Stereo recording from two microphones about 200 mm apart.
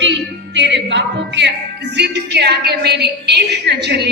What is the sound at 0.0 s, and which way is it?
Music, 65° right (ahead or behind).